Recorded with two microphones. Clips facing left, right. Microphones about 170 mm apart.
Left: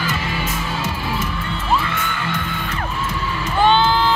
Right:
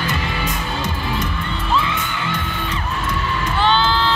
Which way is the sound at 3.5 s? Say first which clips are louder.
Left 3 dB; 50° left (ahead or behind).